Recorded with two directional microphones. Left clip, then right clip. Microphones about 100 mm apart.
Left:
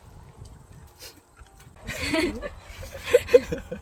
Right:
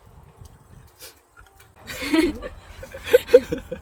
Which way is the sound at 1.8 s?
40° right (ahead or behind).